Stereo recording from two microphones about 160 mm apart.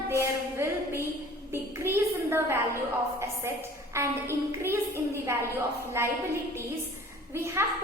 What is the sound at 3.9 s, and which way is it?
A woman's voice, 15° right (ahead or behind).